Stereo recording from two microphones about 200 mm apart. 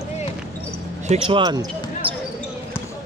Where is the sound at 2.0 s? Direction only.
25° right (ahead or behind).